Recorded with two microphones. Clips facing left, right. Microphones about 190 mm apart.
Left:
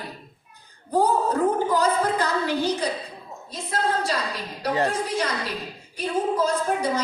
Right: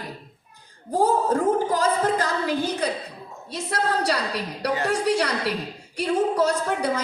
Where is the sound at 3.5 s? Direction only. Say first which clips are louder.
Right 1 dB; 75° right (ahead or behind).